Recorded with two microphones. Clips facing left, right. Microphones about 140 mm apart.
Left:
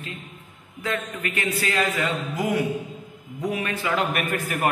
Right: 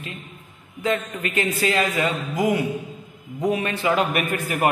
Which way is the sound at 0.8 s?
25° right (ahead or behind).